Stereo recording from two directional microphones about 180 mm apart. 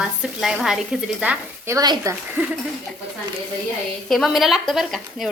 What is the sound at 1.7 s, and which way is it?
Speech, 20° right (ahead or behind).